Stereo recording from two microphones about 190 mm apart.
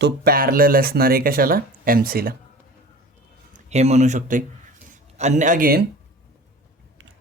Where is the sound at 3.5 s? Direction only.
35° right (ahead or behind).